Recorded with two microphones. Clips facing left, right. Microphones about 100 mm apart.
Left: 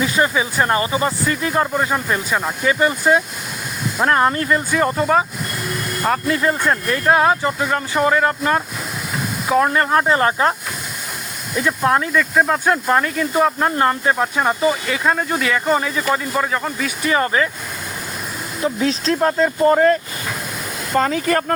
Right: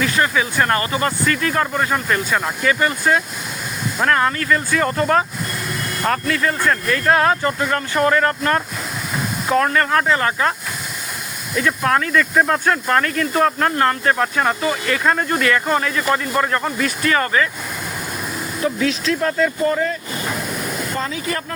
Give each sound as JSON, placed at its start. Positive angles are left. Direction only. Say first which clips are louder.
{"t": 0.0, "sound": "speech", "louder": "left 1 dB", "side_deg": 20}
{"t": 4.8, "sound": "speech", "louder": "left 2 dB", "side_deg": 10}
{"t": 6.2, "sound": "speech", "louder": "left 1 dB", "side_deg": 25}
{"t": 11.5, "sound": "speech", "louder": "left 1 dB", "side_deg": 20}
{"t": 12.1, "sound": "speech", "louder": "even", "side_deg": 5}
{"t": 12.6, "sound": "speech", "louder": "left 1 dB", "side_deg": 15}
{"t": 17.0, "sound": "speech", "louder": "left 1 dB", "side_deg": 20}
{"t": 18.6, "sound": "speech", "louder": "left 1 dB", "side_deg": 30}
{"t": 19.7, "sound": "speech", "louder": "left 7 dB", "side_deg": 50}